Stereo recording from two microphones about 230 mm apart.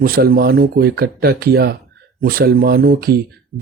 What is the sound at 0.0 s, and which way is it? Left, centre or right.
Speech, right.